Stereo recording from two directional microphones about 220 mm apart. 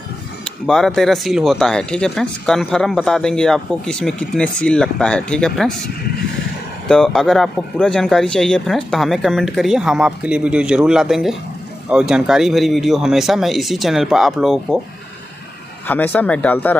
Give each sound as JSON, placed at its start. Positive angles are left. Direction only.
{"t": 0.7, "sound": "speech", "side_deg": 0}
{"t": 6.9, "sound": "speech", "side_deg": 5}
{"t": 15.9, "sound": "speech", "side_deg": 10}